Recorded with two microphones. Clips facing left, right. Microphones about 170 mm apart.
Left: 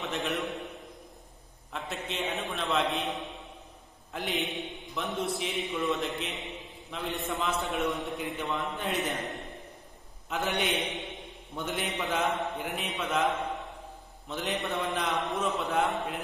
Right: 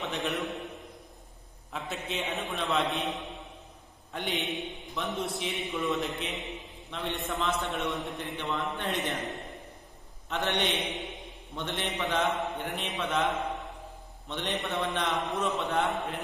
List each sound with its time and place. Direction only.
0.0 s a man's voice: centre (ahead or behind)
1.7 s a man's voice: centre (ahead or behind)
14.3 s a man's voice: 5° left (ahead or behind)